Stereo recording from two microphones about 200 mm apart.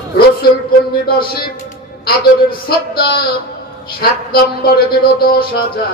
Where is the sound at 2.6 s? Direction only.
50° left (ahead or behind).